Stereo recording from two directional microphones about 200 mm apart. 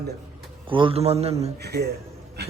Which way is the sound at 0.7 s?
25° right (ahead or behind).